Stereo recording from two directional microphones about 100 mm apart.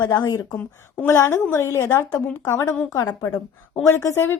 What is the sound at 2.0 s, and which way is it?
Speech, 10° left (ahead or behind).